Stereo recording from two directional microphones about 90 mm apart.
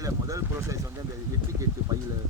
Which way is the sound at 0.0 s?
40° right (ahead or behind).